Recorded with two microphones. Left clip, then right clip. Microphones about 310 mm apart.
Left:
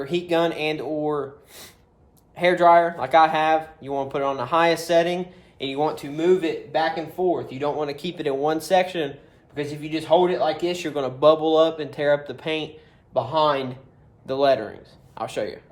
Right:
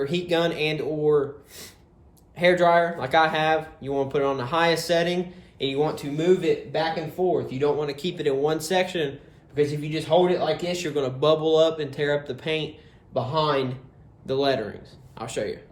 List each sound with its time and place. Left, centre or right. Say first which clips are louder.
0.0 s speech: left 2 dB; centre